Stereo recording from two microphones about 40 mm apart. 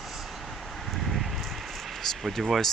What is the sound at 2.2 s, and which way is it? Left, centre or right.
Speech, centre.